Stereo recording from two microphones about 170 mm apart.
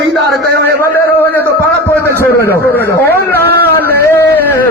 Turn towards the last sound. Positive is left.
turn(degrees=10)  # may be behind; listen again after turning